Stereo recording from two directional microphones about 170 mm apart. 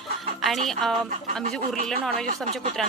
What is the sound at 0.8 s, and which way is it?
Speech, 5° left (ahead or behind).